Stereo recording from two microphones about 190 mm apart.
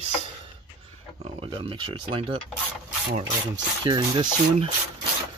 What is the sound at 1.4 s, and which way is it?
Speech, 30° right (ahead or behind).